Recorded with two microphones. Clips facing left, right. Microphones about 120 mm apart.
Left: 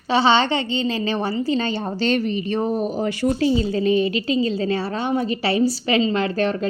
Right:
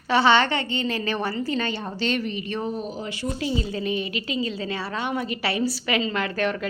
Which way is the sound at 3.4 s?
30° left (ahead or behind).